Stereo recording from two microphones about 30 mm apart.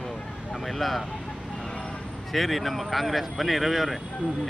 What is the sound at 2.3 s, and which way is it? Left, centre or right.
Speech, centre.